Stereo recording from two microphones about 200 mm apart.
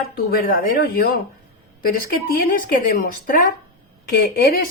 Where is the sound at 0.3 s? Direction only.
45° left (ahead or behind).